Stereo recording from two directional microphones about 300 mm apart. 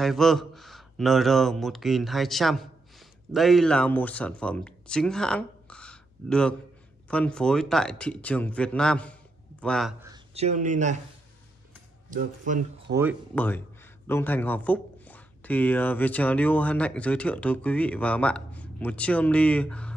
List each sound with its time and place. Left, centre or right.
0.0 s a man's voice: centre
10.0 s speech: centre
12.1 s speech: right
13.3 s speech: centre